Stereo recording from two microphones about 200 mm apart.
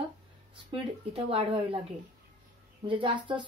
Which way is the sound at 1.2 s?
25° right (ahead or behind).